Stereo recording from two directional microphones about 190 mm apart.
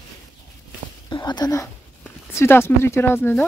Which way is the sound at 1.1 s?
25° left (ahead or behind).